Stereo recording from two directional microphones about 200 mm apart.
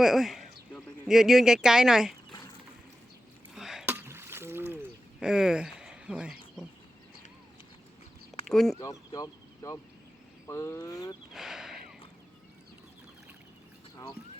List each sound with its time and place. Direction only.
0.0 s speech: centre (ahead or behind)
3.5 s a sound: centre (ahead or behind)
5.2 s speech: 5° right (ahead or behind)
8.4 s speech: centre (ahead or behind)
8.7 s speech: 15° left (ahead or behind)
11.3 s a sound: centre (ahead or behind)